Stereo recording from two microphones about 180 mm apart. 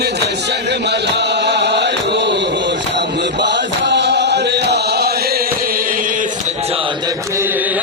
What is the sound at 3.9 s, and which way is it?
Chant, 70° right (ahead or behind).